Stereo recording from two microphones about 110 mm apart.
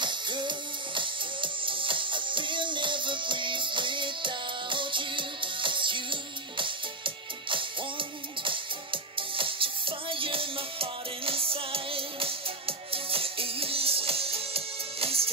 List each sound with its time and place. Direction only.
0.0 s music: 45° right (ahead or behind); by 15.2 s 60° right (ahead or behind)